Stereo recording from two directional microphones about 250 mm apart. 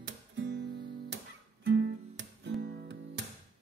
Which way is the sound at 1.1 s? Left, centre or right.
Right.